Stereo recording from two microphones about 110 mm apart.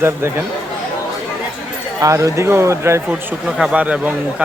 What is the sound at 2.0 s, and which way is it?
Speech, 30° right (ahead or behind).